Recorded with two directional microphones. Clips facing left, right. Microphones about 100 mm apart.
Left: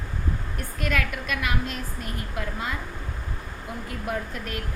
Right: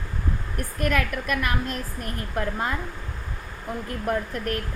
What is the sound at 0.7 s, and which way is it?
A woman's voice, 45° right (ahead or behind).